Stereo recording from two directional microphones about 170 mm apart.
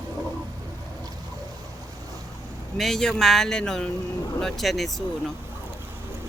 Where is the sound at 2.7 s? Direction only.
Centre (ahead or behind).